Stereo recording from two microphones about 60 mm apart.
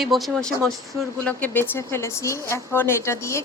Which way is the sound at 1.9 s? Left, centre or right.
Left.